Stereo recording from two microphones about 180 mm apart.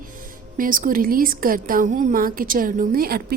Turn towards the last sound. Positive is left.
turn(degrees=-55)  # may be behind; listen again after turning